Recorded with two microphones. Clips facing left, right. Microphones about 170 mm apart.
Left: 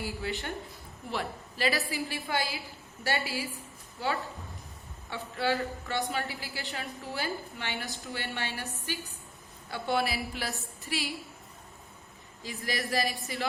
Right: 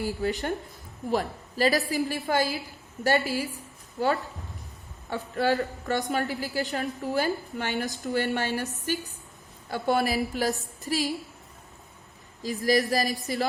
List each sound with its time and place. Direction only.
0.0 s a woman's voice: 40° right (ahead or behind)
12.4 s a woman's voice: 40° right (ahead or behind)